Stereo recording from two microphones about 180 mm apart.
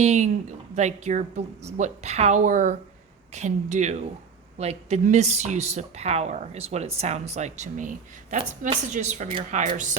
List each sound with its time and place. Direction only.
0.0 s speech: 40° right (ahead or behind)